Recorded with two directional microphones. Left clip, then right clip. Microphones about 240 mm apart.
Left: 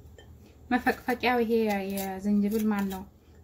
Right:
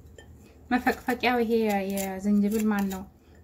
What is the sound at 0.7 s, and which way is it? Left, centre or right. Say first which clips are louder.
Speech: right 1 dB; centre.